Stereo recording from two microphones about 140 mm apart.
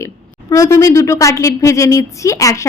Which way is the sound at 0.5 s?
20° left (ahead or behind).